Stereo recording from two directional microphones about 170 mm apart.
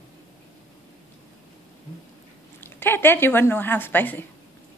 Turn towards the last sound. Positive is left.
turn(degrees=10)  # may be behind; listen again after turning